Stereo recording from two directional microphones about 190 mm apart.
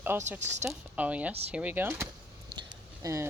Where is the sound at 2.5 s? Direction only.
15° right (ahead or behind).